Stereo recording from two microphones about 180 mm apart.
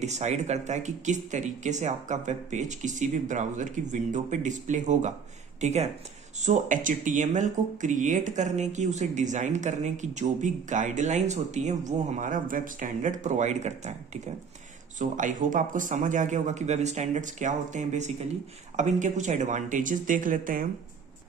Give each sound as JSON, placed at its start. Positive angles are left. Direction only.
{"t": 0.0, "sound": "speech", "side_deg": -40}